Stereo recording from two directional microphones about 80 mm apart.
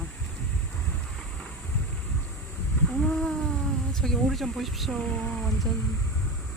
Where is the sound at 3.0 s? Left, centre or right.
Centre.